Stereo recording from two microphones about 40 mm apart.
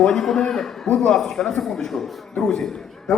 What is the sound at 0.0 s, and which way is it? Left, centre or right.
A man's voice, centre.